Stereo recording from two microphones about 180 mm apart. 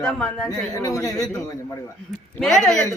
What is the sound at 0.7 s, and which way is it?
Speech, 20° left (ahead or behind).